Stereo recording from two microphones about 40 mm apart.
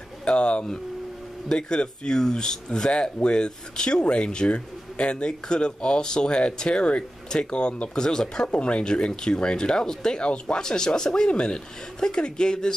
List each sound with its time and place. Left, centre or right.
0.2 s speech: left
2.9 s speech: left
8.5 s speech: left